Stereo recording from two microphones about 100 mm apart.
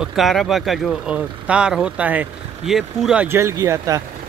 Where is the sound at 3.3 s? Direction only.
30° right (ahead or behind).